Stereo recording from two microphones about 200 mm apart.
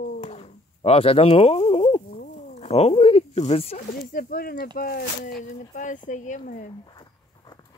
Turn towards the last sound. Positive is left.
turn(degrees=20)  # may be behind; listen again after turning